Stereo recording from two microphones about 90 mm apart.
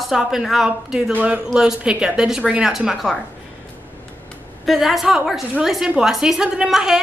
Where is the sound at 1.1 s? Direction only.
20° right (ahead or behind).